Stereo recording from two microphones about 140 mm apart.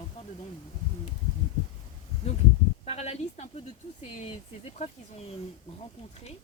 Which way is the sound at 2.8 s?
50° left (ahead or behind).